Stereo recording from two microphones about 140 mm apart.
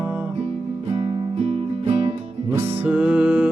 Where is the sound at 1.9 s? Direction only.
50° right (ahead or behind).